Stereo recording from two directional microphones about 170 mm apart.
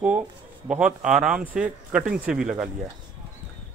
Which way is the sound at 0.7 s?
5° right (ahead or behind).